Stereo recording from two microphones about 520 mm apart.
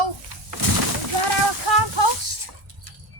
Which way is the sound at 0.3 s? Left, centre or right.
Right.